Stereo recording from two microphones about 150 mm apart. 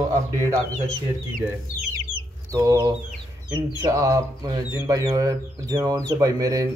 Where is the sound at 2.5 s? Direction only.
20° right (ahead or behind).